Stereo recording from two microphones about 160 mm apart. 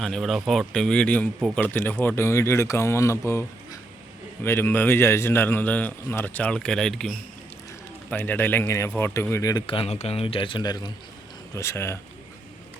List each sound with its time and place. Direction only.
0.0 s a man's voice: centre (ahead or behind)
8.1 s a man's voice: 10° left (ahead or behind)